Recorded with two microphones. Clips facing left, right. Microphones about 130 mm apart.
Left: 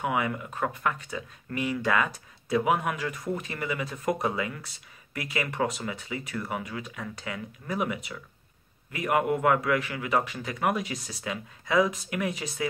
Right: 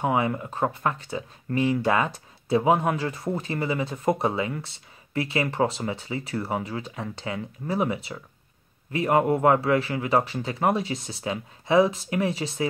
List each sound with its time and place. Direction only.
0.0 s a man's voice: 30° right (ahead or behind)